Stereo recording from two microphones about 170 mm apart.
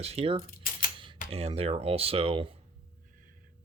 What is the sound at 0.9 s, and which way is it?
Camera, 30° right (ahead or behind).